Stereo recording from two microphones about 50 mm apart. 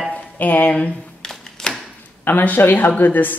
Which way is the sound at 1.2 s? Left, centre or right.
Centre.